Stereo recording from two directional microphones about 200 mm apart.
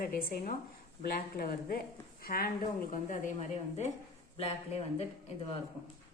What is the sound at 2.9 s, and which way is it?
Speech, 35° left (ahead or behind).